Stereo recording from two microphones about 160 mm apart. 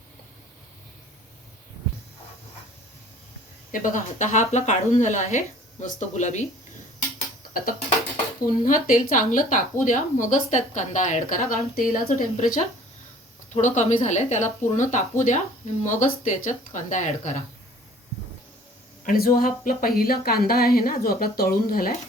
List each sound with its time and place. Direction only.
3.7 s speech: 55° left (ahead or behind)
7.5 s speech: 60° left (ahead or behind)
13.5 s speech: 45° left (ahead or behind)
19.0 s speech: 65° left (ahead or behind)